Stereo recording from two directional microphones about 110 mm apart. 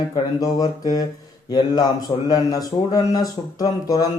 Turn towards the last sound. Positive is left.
turn(degrees=35)  # may be behind; listen again after turning